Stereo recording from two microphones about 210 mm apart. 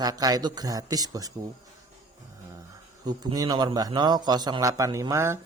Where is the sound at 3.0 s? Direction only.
20° right (ahead or behind).